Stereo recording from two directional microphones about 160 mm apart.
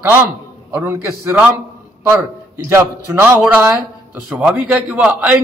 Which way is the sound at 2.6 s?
15° right (ahead or behind).